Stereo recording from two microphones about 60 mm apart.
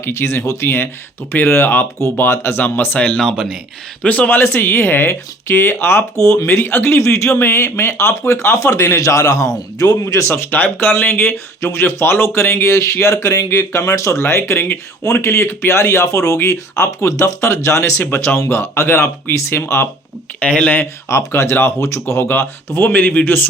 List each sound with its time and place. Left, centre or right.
0.0 s speech: left
3.2 s speech: centre
4.0 s speech: left
4.3 s speech: left
8.6 s a man's voice: left
10.2 s speech: left
10.5 s speech: left
15.0 s speech: left
16.0 s speech: left
20.4 s speech: left
21.1 s speech: left
21.8 s speech: left
22.3 s speech: left